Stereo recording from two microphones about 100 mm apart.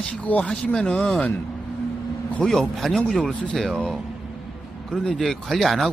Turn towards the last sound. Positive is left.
turn(degrees=0)  # may be behind; listen again after turning